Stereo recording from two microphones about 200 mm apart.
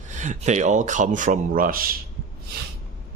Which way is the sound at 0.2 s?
35° right (ahead or behind).